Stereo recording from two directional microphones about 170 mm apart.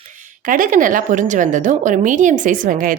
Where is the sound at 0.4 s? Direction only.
50° right (ahead or behind).